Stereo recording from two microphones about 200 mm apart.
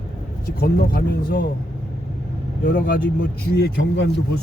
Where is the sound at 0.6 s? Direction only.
45° left (ahead or behind).